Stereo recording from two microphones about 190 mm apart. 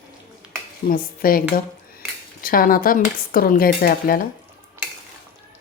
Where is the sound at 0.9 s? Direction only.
50° left (ahead or behind).